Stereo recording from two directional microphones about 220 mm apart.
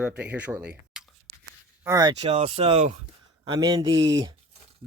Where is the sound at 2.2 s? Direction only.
25° right (ahead or behind).